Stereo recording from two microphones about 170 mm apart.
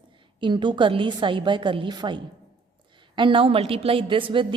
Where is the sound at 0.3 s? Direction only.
30° right (ahead or behind).